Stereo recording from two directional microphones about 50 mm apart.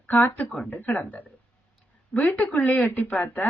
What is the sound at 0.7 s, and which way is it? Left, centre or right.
Speech, left.